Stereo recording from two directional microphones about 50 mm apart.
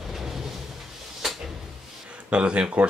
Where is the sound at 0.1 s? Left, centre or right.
Centre.